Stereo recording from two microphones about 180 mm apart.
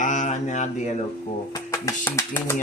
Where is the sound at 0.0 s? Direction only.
45° left (ahead or behind).